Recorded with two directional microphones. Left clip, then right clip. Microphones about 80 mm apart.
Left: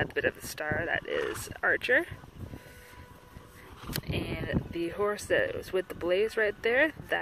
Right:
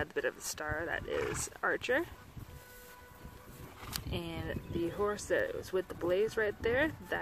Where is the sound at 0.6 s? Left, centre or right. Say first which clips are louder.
Left 6 dB; left.